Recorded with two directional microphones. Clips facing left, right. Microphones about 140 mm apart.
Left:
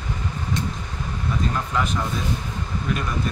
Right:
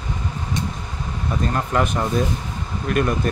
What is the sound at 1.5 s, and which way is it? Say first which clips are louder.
Speech: right 4 dB; 55° right (ahead or behind).